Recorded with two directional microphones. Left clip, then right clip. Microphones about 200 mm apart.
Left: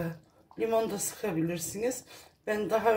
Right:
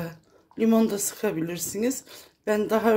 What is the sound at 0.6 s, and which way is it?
Speech, 50° right (ahead or behind).